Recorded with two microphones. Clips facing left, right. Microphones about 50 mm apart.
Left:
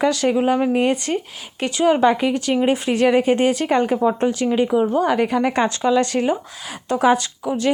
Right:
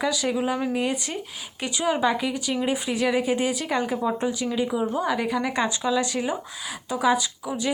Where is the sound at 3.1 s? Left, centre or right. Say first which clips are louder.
Left 7 dB; left.